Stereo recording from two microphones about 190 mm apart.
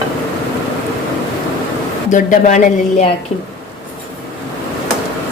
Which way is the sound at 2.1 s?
45° left (ahead or behind).